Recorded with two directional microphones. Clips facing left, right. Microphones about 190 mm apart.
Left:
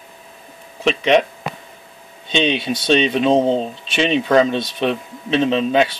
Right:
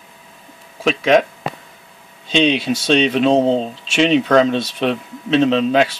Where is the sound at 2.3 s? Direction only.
Centre (ahead or behind).